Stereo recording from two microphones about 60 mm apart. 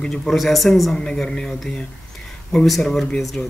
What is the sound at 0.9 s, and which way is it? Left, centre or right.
Speech, centre.